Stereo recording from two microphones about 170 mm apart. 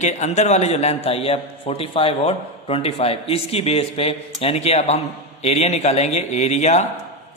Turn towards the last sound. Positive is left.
turn(degrees=40)  # may be behind; listen again after turning